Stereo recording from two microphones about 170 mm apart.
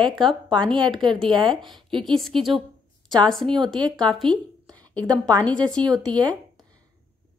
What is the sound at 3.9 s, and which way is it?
Speech, 5° left (ahead or behind).